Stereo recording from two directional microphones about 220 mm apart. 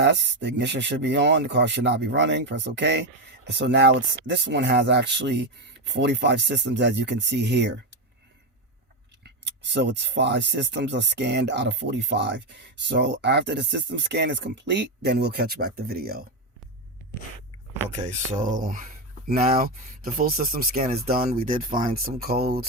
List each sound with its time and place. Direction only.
0.0 s speech: 55° right (ahead or behind)
9.7 s speech: 55° right (ahead or behind)
18.1 s speech: 35° right (ahead or behind)